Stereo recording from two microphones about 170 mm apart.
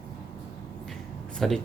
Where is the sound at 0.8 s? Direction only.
Centre (ahead or behind).